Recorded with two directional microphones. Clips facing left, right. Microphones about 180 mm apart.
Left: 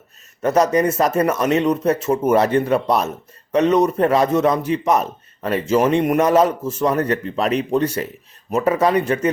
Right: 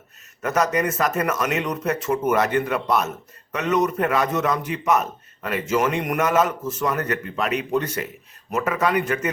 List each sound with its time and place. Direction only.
0.4 s a man's voice: 30° left (ahead or behind)